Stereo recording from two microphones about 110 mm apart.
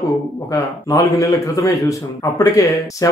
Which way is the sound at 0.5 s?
30° left (ahead or behind).